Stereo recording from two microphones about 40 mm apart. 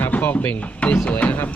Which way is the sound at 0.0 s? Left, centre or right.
Left.